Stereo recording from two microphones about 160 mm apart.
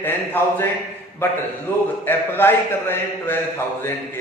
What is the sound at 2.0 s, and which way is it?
Speech, 15° left (ahead or behind).